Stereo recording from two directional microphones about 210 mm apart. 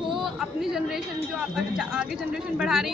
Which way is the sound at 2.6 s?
Centre (ahead or behind).